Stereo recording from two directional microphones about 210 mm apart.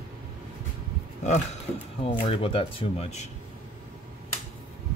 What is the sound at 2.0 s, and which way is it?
Speech, 30° left (ahead or behind).